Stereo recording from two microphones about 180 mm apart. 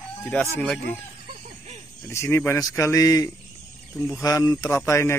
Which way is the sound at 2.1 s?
15° left (ahead or behind).